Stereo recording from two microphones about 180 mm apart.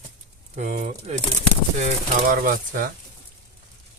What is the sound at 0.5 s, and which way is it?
Speech, 40° right (ahead or behind).